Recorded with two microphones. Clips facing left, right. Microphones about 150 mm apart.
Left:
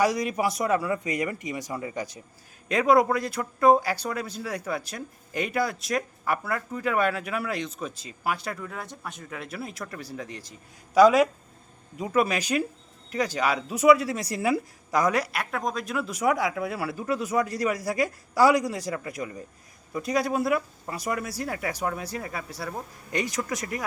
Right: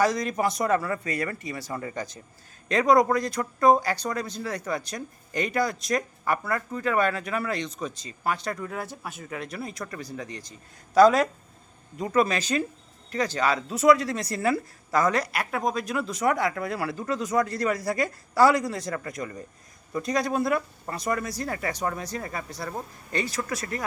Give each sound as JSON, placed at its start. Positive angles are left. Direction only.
{"t": 0.0, "sound": "speech", "side_deg": 10}
{"t": 8.6, "sound": "speech", "side_deg": -5}
{"t": 15.3, "sound": "speech", "side_deg": 0}
{"t": 23.1, "sound": "speech", "side_deg": 15}